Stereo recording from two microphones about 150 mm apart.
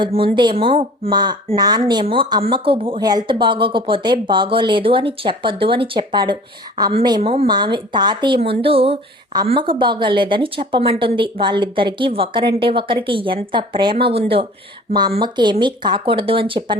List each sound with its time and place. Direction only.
0.0 s speech: 35° right (ahead or behind)
7.2 s speech: 40° right (ahead or behind)
7.4 s speech: 30° right (ahead or behind)